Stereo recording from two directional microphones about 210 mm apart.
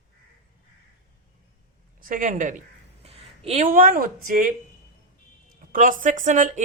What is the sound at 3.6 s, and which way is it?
Speech, 40° right (ahead or behind).